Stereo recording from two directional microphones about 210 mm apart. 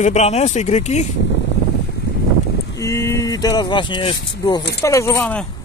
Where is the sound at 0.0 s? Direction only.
30° left (ahead or behind).